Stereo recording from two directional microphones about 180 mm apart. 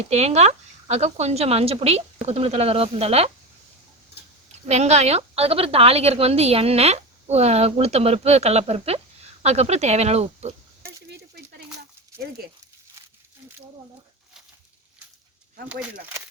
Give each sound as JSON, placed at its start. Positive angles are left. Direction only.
{"t": 0.1, "sound": "a woman's voice", "side_deg": -35}
{"t": 4.6, "sound": "a woman's voice", "side_deg": -40}